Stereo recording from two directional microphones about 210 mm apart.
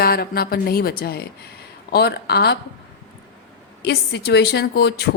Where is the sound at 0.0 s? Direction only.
45° left (ahead or behind).